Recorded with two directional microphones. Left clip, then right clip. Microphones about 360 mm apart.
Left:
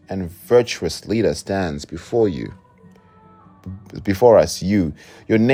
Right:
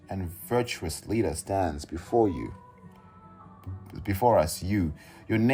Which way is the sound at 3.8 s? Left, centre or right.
Left.